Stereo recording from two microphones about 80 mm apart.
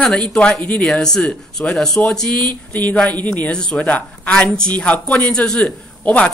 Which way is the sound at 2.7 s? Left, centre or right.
Centre.